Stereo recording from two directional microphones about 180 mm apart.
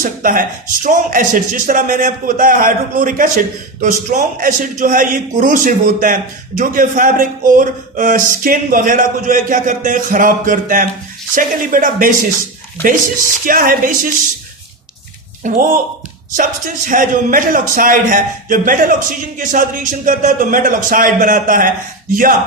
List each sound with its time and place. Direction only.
0.0 s a man's voice: 50° right (ahead or behind)
13.4 s a man's voice: 50° right (ahead or behind)
15.4 s a man's voice: 45° right (ahead or behind)